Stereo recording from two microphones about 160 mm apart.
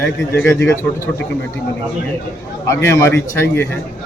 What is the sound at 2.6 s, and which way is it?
Speech, 15° left (ahead or behind).